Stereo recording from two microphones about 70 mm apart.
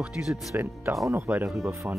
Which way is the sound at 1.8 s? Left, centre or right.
Right.